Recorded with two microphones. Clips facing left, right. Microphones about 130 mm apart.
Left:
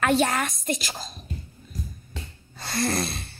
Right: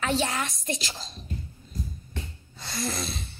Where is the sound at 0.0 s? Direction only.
55° left (ahead or behind).